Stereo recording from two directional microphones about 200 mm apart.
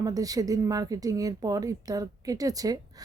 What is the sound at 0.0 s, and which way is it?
A woman's voice, 15° right (ahead or behind).